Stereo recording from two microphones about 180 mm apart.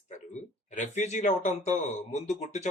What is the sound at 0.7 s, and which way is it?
Speech, 40° left (ahead or behind).